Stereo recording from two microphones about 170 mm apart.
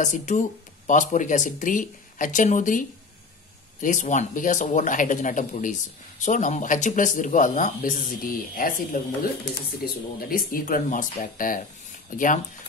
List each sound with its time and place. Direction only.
0.0 s speech: 45° left (ahead or behind)